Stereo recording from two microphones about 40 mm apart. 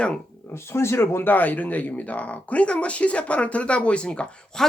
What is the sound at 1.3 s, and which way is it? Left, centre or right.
Speech, left.